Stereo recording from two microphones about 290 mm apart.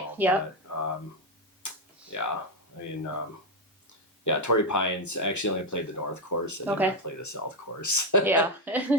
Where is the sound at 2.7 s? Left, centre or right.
Left.